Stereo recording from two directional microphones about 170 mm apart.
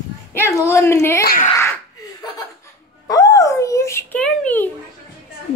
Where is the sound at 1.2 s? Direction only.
65° left (ahead or behind).